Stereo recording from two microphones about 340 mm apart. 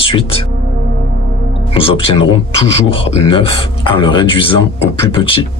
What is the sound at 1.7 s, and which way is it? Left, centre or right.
A man's voice, centre.